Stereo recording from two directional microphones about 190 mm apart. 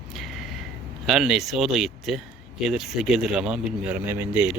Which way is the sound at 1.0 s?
Centre (ahead or behind).